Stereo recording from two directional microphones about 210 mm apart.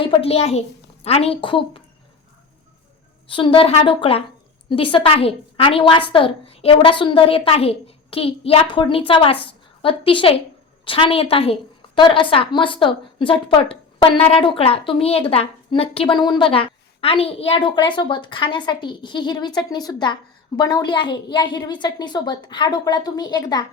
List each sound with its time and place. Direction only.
0.0 s a woman's voice: 25° left (ahead or behind)
3.2 s a woman's voice: 25° left (ahead or behind)